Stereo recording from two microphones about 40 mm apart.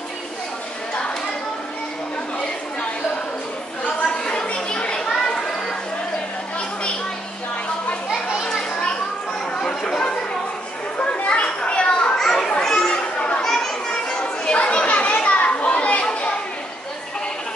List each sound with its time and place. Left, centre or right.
4.0 s chatter: left
5.2 s a sound: left
9.6 s a sound: centre
11.0 s children playing: left
12.2 s children playing: centre
14.2 s children playing: left